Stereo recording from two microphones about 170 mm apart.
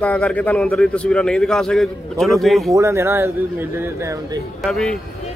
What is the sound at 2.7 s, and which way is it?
Speech, 15° right (ahead or behind).